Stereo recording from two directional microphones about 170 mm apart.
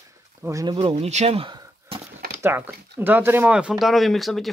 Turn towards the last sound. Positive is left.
turn(degrees=0)  # may be behind; listen again after turning